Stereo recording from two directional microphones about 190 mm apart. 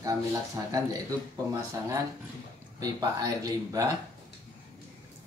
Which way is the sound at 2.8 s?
20° right (ahead or behind).